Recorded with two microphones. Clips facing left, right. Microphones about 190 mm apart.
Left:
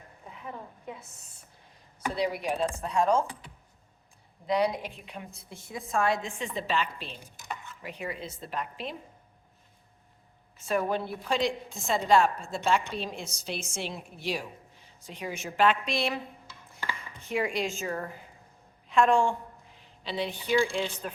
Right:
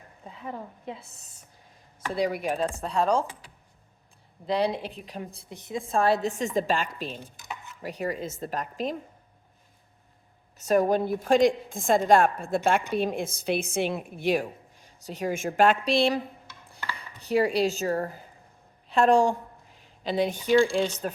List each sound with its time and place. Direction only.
0.3 s a woman's voice: 30° right (ahead or behind)
2.1 s a woman's voice: 50° right (ahead or behind)
2.6 s a woman's voice: 35° right (ahead or behind)
4.4 s a woman's voice: 30° right (ahead or behind)
5.5 s a woman's voice: 20° right (ahead or behind)
5.9 s a woman's voice: 35° right (ahead or behind)
7.2 s stir: 10° left (ahead or behind)
7.8 s a woman's voice: 40° right (ahead or behind)
10.6 s a woman's voice: 40° right (ahead or behind)
14.4 s a woman's voice: 40° right (ahead or behind)